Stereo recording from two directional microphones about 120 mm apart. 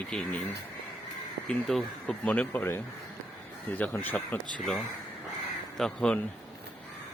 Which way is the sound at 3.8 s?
15° left (ahead or behind).